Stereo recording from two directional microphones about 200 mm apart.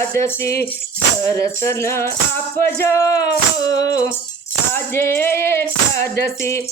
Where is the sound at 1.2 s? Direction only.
15° left (ahead or behind).